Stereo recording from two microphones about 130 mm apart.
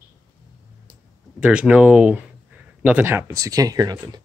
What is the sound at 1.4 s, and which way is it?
Speech, 10° right (ahead or behind).